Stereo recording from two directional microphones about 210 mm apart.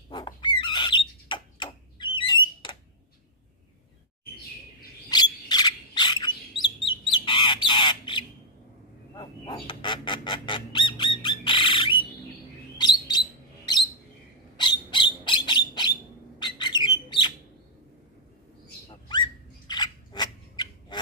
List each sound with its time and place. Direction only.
0.1 s bird: 20° left (ahead or behind)
0.6 s squawk: 20° left (ahead or behind)
5.1 s bird: 20° left (ahead or behind)
6.9 s squawk: 20° left (ahead or behind)
9.1 s honk: 20° left (ahead or behind)
12.7 s bird: 20° left (ahead or behind)
14.6 s bird: 20° left (ahead or behind)
18.9 s a sound: 20° left (ahead or behind)